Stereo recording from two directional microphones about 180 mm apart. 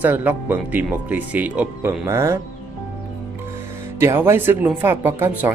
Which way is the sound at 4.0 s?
15° right (ahead or behind).